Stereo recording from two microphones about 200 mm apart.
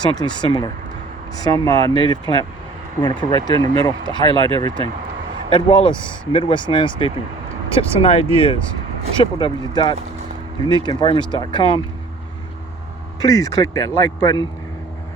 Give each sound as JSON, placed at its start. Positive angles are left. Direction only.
{"t": 0.0, "sound": "speech", "side_deg": 20}
{"t": 4.4, "sound": "speech", "side_deg": -25}
{"t": 5.5, "sound": "speech", "side_deg": 25}
{"t": 13.1, "sound": "speech", "side_deg": 20}